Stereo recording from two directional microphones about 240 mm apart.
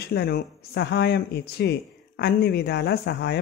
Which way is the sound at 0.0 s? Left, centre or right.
Left.